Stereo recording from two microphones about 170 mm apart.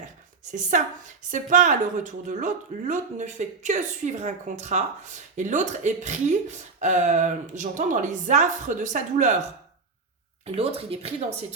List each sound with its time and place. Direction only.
0.5 s a woman's voice: 50° right (ahead or behind)
10.4 s speech: 35° right (ahead or behind)